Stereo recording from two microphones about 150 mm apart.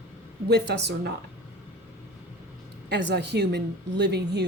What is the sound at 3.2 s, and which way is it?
Speech, 90° right.